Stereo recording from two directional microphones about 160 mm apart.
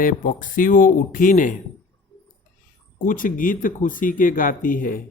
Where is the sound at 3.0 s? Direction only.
55° left (ahead or behind).